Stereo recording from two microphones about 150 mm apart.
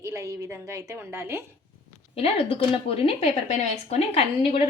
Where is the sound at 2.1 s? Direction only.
40° left (ahead or behind).